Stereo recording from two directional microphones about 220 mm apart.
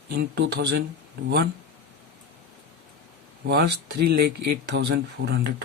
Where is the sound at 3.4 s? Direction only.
50° right (ahead or behind).